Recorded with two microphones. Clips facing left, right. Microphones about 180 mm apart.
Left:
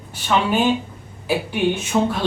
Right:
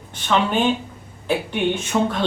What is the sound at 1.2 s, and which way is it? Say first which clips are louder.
Speech: left 1 dB; 5° left (ahead or behind).